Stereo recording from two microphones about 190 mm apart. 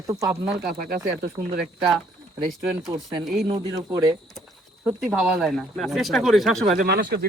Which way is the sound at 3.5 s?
20° right (ahead or behind).